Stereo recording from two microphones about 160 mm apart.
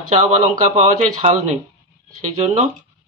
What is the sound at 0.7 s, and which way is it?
Speech, 45° right (ahead or behind).